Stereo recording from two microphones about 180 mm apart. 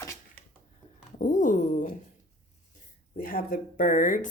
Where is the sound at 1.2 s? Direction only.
45° left (ahead or behind).